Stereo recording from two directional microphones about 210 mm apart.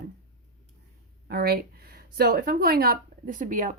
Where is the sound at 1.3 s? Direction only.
45° right (ahead or behind).